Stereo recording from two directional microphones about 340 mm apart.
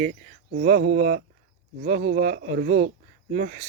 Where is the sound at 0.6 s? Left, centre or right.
Right.